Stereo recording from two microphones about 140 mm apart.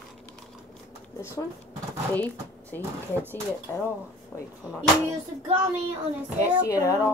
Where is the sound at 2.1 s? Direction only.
10° left (ahead or behind).